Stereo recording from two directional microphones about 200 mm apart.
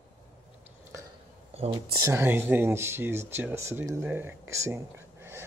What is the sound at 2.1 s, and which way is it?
Speech, 10° right (ahead or behind).